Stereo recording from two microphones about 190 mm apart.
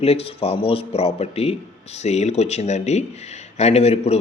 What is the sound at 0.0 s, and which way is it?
A man's voice, 30° left (ahead or behind).